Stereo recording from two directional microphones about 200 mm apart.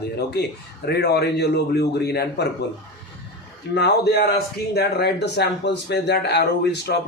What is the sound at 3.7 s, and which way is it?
Speech, 55° left (ahead or behind).